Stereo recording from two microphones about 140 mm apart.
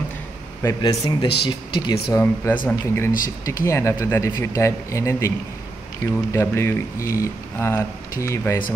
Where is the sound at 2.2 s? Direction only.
15° left (ahead or behind).